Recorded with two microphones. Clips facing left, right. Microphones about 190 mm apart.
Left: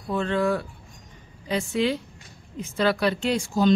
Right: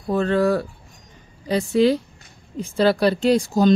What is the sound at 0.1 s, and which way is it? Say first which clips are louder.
A woman's voice: right 5 dB; 40° right (ahead or behind).